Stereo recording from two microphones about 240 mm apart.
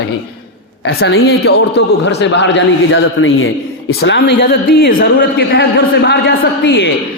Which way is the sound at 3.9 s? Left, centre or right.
Left.